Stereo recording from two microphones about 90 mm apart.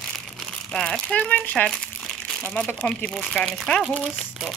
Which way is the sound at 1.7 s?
5° left (ahead or behind).